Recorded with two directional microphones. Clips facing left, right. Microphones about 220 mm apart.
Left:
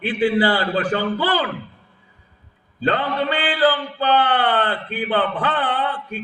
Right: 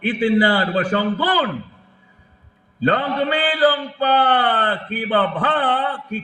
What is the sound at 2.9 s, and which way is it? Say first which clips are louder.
A man's voice: right 1 dB; 40° right (ahead or behind).